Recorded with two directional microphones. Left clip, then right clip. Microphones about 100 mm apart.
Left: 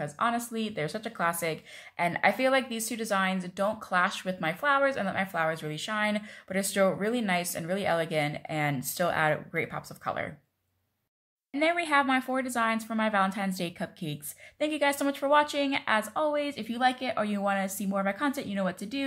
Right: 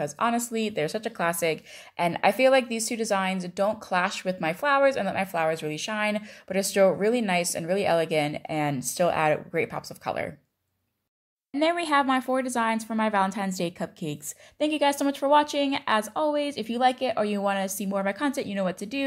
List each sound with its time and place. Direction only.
0.0 s speech: 70° right (ahead or behind)
11.6 s speech: 45° right (ahead or behind)